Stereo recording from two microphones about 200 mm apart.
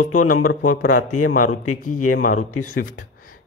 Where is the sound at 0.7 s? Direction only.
40° left (ahead or behind).